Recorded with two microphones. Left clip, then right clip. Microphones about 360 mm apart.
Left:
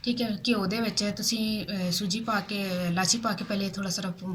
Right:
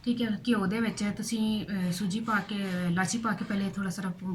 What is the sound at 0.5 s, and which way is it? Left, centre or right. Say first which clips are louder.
Speech: left 1 dB; centre.